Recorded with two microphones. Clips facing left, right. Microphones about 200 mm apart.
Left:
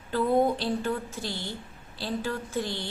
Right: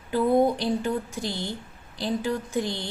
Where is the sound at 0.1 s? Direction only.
15° right (ahead or behind).